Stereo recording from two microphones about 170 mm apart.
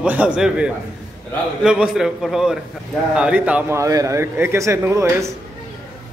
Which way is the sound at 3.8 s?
20° right (ahead or behind).